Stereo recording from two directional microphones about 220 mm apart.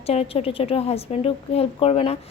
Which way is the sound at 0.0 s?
25° left (ahead or behind).